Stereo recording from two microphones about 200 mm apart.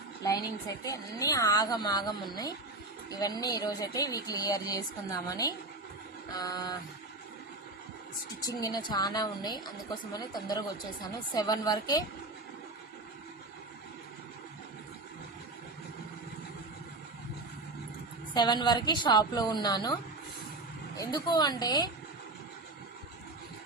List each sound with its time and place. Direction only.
0.2 s speech: 20° left (ahead or behind)
8.4 s speech: 20° left (ahead or behind)
18.3 s speech: 20° left (ahead or behind)